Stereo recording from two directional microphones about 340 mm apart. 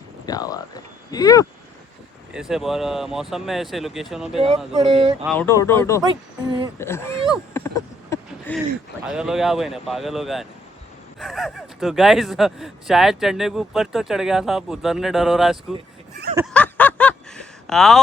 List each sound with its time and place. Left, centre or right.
0.3 s speech: centre
2.3 s speech: centre
4.4 s speech: centre
5.2 s speech: centre
16.3 s a sound: centre
16.6 s snicker: centre